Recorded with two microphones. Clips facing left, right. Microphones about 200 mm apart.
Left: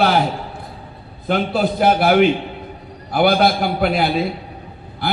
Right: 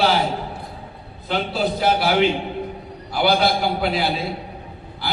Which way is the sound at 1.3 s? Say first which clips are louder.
Left 4 dB; 55° left (ahead or behind).